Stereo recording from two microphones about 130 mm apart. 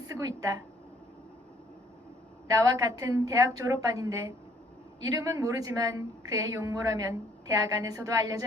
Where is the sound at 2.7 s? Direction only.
25° right (ahead or behind).